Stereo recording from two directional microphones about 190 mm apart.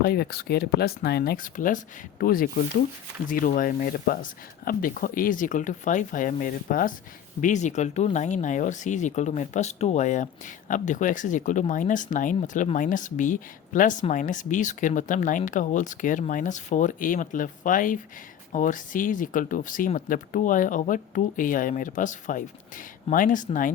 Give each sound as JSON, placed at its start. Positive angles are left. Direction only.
{"t": 0.0, "sound": "speech", "side_deg": 55}